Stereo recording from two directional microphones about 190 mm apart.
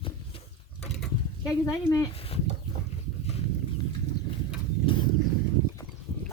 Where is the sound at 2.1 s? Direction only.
30° left (ahead or behind).